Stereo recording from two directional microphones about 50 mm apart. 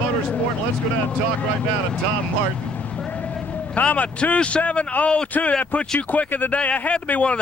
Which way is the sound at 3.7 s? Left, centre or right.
Left.